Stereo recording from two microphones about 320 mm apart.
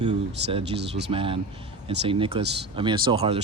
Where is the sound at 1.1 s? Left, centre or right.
Centre.